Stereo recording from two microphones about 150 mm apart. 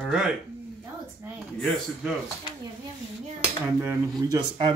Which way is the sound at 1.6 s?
Centre (ahead or behind).